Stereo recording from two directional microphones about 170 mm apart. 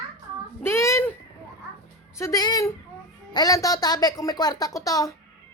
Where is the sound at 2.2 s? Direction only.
20° left (ahead or behind).